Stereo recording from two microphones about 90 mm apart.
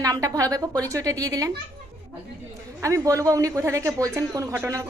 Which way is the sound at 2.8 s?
35° right (ahead or behind).